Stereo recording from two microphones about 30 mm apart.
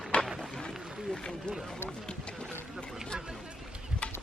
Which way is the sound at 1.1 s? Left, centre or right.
Left.